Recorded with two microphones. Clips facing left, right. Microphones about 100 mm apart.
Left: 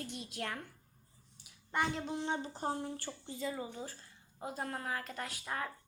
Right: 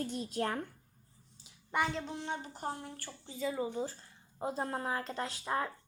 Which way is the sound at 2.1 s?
25° left (ahead or behind).